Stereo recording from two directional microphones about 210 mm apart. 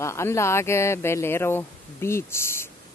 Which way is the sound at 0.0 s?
15° left (ahead or behind).